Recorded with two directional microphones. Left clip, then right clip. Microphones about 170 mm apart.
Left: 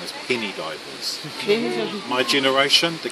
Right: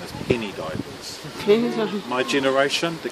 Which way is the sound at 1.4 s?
30° right (ahead or behind).